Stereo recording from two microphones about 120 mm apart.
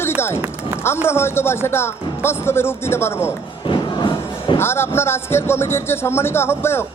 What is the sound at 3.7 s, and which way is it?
Crowd, 40° left (ahead or behind).